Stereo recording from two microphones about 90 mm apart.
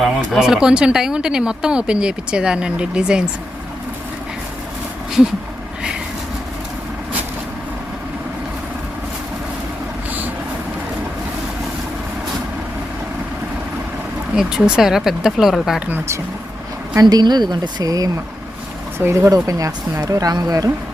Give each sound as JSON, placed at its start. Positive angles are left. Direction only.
{"t": 0.0, "sound": "speech", "side_deg": -5}
{"t": 14.3, "sound": "speech", "side_deg": -5}
{"t": 17.0, "sound": "speech", "side_deg": -50}
{"t": 18.9, "sound": "speech", "side_deg": -25}
{"t": 19.3, "sound": "speech", "side_deg": -40}